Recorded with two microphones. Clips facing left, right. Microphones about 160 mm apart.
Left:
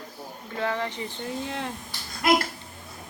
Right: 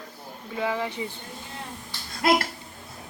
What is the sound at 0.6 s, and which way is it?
Speech, 10° right (ahead or behind).